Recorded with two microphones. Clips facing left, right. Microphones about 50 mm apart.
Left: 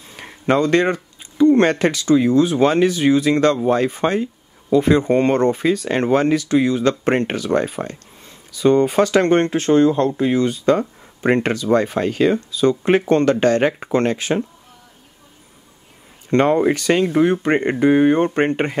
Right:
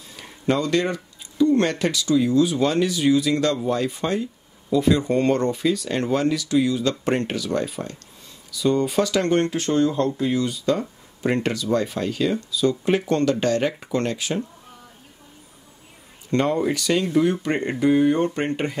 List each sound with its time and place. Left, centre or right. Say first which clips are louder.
0.1 s speech: left 5 dB; left
16.3 s speech: left 6 dB; left